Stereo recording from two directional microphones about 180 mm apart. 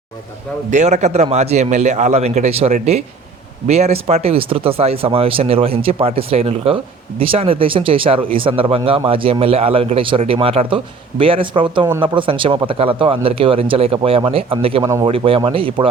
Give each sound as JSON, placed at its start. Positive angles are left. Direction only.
{"t": 0.7, "sound": "speech", "side_deg": -40}